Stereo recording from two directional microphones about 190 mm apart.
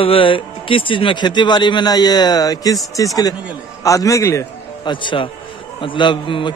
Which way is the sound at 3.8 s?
15° left (ahead or behind).